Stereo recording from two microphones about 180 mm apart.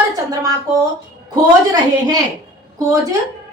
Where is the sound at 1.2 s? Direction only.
20° right (ahead or behind).